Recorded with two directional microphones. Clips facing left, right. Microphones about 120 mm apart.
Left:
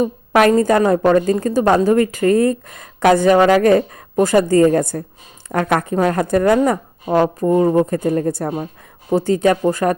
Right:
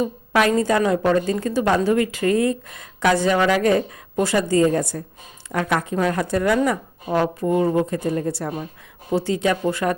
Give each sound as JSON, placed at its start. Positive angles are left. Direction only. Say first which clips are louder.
{"t": 0.0, "sound": "a woman's voice", "louder": "left 5 dB", "side_deg": 50}